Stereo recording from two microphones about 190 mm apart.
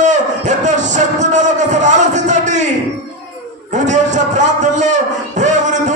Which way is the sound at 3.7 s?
40° right (ahead or behind).